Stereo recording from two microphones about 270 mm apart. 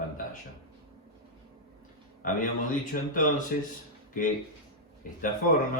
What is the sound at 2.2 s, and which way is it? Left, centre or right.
Speech, left.